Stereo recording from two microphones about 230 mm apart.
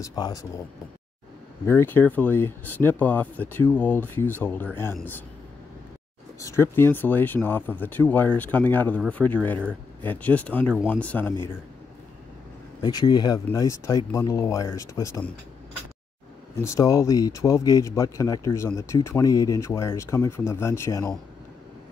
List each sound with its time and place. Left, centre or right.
0.0 s speech: centre
1.7 s speech: centre
6.4 s speech: centre
12.8 s speech: centre
16.6 s speech: centre